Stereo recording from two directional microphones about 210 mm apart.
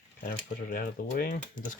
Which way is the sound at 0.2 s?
45° left (ahead or behind).